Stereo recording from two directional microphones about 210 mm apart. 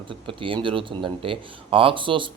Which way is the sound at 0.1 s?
25° right (ahead or behind).